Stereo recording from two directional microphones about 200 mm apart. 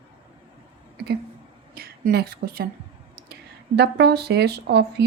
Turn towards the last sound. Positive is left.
turn(degrees=-55)  # may be behind; listen again after turning